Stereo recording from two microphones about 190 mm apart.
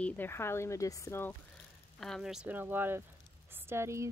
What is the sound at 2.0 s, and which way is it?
Speech, centre (ahead or behind).